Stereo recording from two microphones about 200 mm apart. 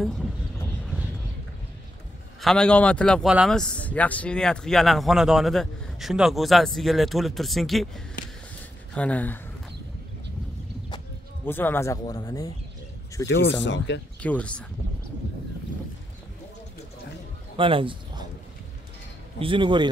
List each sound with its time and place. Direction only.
0.0 s speech: centre (ahead or behind)
0.8 s vehicle: 5° right (ahead or behind)
2.4 s a man's voice: 5° left (ahead or behind)
11.4 s speech: 10° left (ahead or behind)
13.7 s speech: 60° left (ahead or behind)
14.2 s speech: 5° left (ahead or behind)
17.6 s a man's voice: 25° right (ahead or behind)
19.4 s speech: 25° right (ahead or behind)